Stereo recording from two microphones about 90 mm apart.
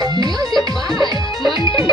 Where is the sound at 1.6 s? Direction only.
70° left (ahead or behind).